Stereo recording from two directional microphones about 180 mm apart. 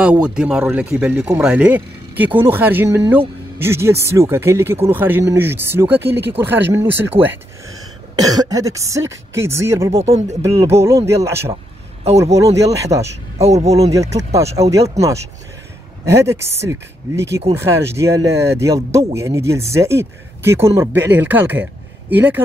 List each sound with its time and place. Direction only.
0.0 s speech: 5° right (ahead or behind)
10.0 s speech: 35° right (ahead or behind)
10.5 s speech: 15° right (ahead or behind)
12.9 s speech: 20° right (ahead or behind)
13.4 s speech: 35° right (ahead or behind)
13.7 s speech: 20° right (ahead or behind)